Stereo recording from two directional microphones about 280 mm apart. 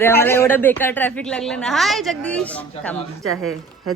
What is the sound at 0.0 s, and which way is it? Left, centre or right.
Speech, centre.